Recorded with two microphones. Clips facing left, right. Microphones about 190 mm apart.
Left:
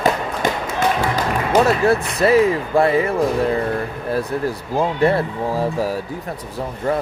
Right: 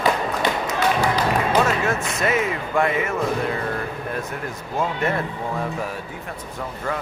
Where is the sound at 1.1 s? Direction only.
40° left (ahead or behind).